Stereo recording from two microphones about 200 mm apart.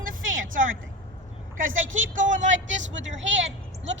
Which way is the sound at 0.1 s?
80° right.